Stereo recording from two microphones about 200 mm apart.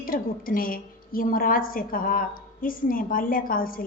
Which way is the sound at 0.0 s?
45° left (ahead or behind).